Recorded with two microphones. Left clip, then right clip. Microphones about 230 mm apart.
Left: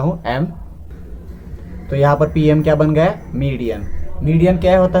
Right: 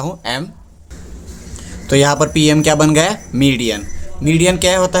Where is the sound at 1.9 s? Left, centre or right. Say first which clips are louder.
Right 2 dB; right.